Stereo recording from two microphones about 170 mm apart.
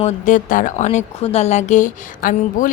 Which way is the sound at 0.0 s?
50° left (ahead or behind).